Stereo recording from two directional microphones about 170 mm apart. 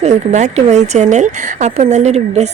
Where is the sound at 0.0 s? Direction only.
45° right (ahead or behind).